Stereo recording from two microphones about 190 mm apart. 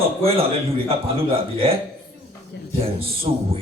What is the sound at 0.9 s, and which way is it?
Speech, 30° right (ahead or behind).